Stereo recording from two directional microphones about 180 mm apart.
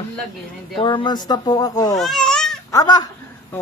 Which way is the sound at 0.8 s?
25° left (ahead or behind).